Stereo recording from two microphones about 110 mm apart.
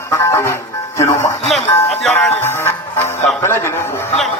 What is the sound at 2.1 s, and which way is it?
Music, 20° left (ahead or behind).